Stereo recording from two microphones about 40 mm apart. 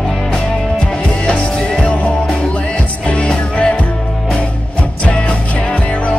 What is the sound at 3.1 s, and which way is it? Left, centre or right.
Music, left.